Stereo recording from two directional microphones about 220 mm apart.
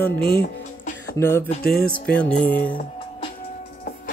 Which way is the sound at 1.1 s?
10° left (ahead or behind).